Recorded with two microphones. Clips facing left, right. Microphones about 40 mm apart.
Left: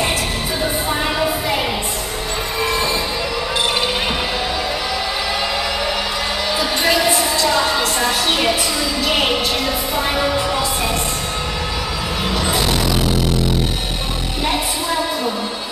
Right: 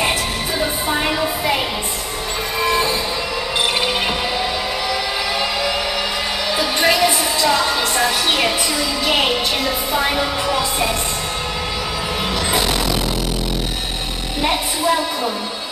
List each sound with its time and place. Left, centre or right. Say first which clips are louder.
6.5 s music: right 1 dB; centre
7.3 s a sound: even; centre
9.0 s music: even; centre
12.4 s music: even; centre